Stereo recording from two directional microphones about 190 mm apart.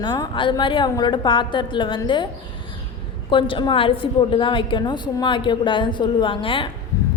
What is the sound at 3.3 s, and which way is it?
A woman's voice, 25° left (ahead or behind).